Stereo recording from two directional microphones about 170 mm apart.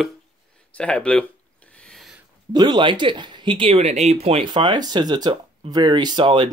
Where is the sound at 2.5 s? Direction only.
25° right (ahead or behind).